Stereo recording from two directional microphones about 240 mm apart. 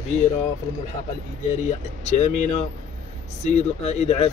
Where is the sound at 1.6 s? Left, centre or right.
Left.